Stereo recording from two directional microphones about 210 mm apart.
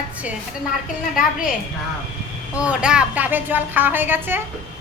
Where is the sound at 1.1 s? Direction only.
40° left (ahead or behind).